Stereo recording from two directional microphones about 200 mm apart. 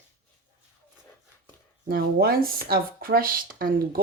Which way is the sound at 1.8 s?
50° right (ahead or behind).